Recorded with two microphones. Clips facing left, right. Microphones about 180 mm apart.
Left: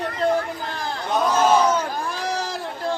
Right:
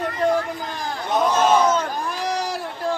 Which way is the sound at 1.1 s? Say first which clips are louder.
Right 1 dB; 10° right (ahead or behind).